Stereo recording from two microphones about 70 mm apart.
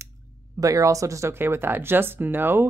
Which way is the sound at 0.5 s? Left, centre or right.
Right.